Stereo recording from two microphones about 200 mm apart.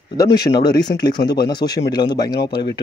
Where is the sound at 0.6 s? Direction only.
20° left (ahead or behind).